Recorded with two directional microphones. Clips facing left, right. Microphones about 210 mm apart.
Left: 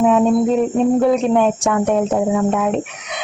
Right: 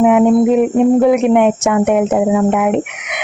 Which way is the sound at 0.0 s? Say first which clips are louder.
Right 4 dB; 15° right (ahead or behind).